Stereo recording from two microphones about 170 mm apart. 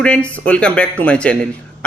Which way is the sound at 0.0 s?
5° left (ahead or behind).